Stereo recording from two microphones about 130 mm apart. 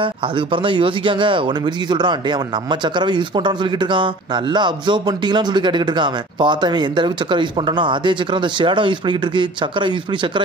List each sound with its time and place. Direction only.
0.0 s speech: 40° right (ahead or behind)